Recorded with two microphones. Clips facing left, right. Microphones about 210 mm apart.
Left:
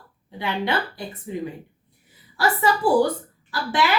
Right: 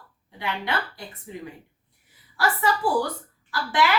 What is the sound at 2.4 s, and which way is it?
A woman's voice, 25° left (ahead or behind).